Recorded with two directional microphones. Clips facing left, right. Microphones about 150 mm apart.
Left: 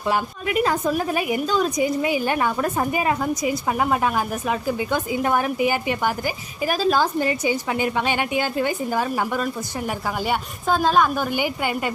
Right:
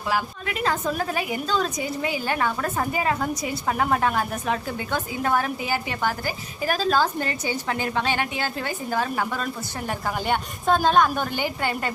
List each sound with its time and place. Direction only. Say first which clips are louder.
0.1 s a woman's voice: left 4 dB; 15° left (ahead or behind)